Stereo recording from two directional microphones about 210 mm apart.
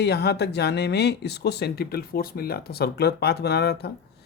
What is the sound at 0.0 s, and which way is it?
Speech, 50° left (ahead or behind).